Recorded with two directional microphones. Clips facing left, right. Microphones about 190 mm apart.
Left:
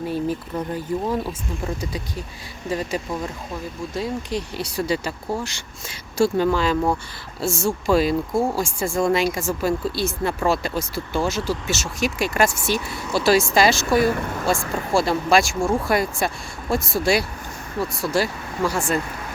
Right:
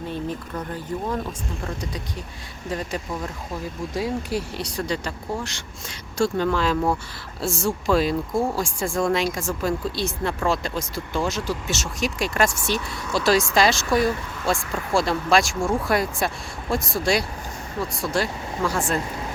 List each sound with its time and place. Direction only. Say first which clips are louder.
0.1 s speech: left 4 dB; 10° left (ahead or behind)
3.9 s speech: even; 10° right (ahead or behind)
4.6 s speech: left 3 dB; 5° left (ahead or behind)
14.0 s speech: left 3 dB; 55° left (ahead or behind)
14.9 s speech: left 2 dB; centre (ahead or behind)